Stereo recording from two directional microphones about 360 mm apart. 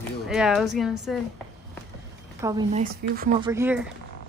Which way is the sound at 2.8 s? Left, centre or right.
Right.